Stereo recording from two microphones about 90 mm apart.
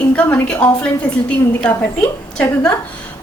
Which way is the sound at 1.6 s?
20° left (ahead or behind).